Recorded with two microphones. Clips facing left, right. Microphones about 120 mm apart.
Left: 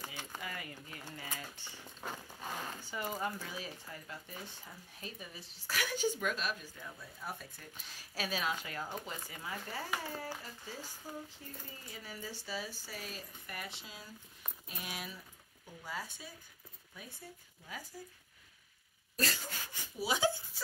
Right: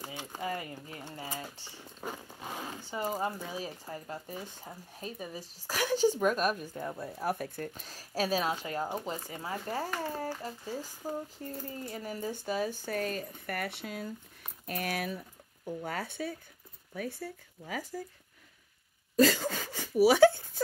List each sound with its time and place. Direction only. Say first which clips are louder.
0.0 s speech: right 7 dB; 25° right (ahead or behind)
2.0 s zipper: right 4 dB; 10° right (ahead or behind)
2.7 s speech: right 6 dB; 30° right (ahead or behind)
6.3 s speech: right 9 dB; 50° right (ahead or behind)
7.8 s speech: right 7 dB; 40° right (ahead or behind); by 18.0 s 90° right
19.2 s speech: right 9 dB; 90° right; by 20.6 s 60° right (ahead or behind)